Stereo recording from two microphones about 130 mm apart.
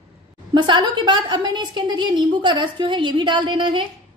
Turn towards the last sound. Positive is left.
turn(degrees=-40)  # may be behind; listen again after turning